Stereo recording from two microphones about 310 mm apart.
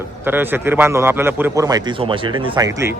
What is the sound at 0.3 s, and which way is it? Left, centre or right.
A man's voice, centre.